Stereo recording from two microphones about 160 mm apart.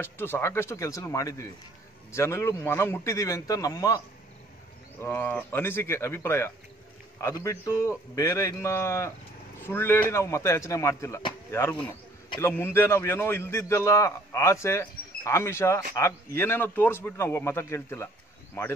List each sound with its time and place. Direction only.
0.0 s a man's voice: 15° left (ahead or behind)
5.0 s a man's voice: 10° left (ahead or behind)